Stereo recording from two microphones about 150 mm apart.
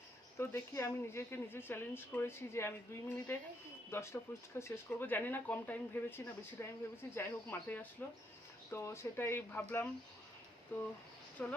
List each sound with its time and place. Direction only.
0.3 s speech: 20° left (ahead or behind)
3.9 s speech: 15° left (ahead or behind)